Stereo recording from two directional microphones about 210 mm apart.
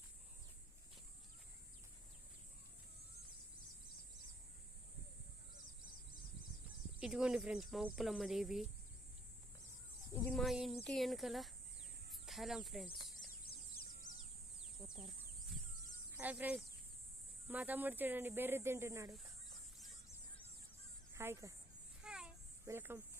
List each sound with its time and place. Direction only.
7.0 s speech: 5° right (ahead or behind)
10.3 s speech: centre (ahead or behind)
13.1 s a sound: 45° left (ahead or behind)
14.8 s speech: centre (ahead or behind)
16.1 s speech: 10° right (ahead or behind)
19.1 s a sound: centre (ahead or behind)
21.1 s speech: 10° right (ahead or behind)
22.0 s a sound: 5° right (ahead or behind)
22.6 s speech: 10° right (ahead or behind)